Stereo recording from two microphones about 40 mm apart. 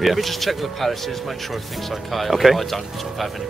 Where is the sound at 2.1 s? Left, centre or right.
Centre.